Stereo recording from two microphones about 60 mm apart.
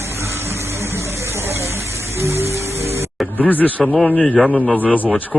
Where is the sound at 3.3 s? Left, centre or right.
Left.